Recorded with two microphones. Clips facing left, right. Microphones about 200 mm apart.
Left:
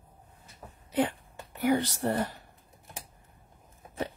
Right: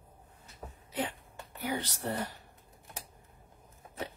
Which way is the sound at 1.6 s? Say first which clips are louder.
Left 9 dB; 55° left (ahead or behind).